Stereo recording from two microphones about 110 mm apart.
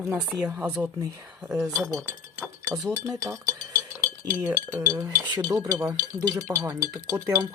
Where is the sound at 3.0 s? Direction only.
30° right (ahead or behind).